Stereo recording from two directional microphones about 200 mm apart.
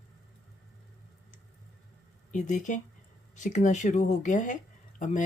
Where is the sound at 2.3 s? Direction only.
40° left (ahead or behind).